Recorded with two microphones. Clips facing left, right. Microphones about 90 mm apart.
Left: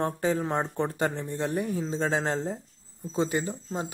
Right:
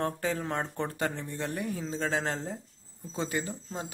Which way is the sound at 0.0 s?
25° left (ahead or behind).